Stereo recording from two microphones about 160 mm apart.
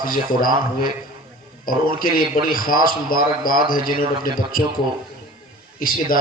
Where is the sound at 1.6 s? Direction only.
60° left (ahead or behind).